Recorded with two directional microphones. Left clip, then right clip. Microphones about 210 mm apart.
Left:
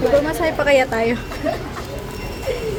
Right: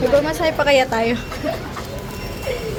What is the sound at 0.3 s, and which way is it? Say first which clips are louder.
Speech: even; 10° left (ahead or behind).